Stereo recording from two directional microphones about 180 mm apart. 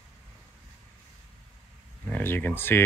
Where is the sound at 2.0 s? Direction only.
10° left (ahead or behind).